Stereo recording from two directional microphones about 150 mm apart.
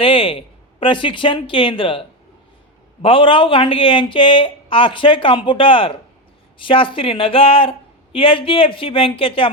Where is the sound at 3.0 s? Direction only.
35° left (ahead or behind).